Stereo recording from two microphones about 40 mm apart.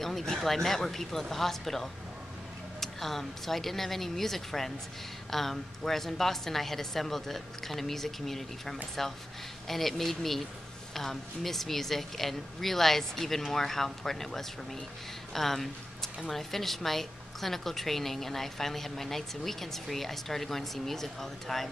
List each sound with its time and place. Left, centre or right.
0.0 s a woman's voice: centre